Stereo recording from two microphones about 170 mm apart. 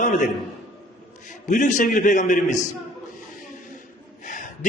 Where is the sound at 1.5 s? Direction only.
50° left (ahead or behind).